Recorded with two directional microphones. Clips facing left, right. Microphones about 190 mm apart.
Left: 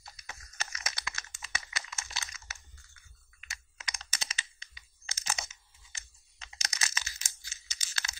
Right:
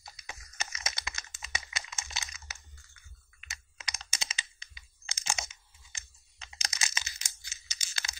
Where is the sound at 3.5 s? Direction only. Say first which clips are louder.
Even; 20° right (ahead or behind).